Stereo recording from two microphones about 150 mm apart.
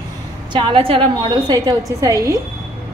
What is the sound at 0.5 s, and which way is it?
A woman's voice, 35° right (ahead or behind).